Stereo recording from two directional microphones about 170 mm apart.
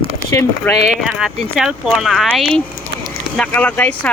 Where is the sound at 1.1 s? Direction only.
5° right (ahead or behind).